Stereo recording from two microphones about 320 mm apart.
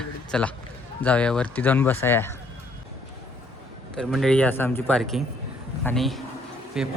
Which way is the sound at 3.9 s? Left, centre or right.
Centre.